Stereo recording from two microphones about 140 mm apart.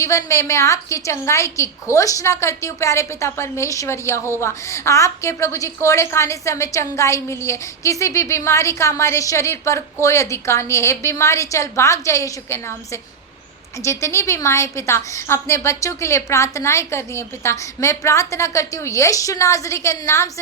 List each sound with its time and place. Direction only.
0.0 s a woman's voice: 20° left (ahead or behind)